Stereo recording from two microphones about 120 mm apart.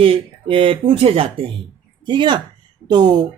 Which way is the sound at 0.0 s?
50° right (ahead or behind).